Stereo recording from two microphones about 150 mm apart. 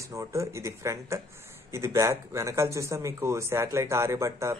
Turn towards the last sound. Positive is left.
turn(degrees=-20)  # may be behind; listen again after turning